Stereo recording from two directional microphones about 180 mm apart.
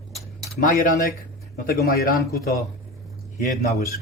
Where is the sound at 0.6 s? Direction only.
50° left (ahead or behind).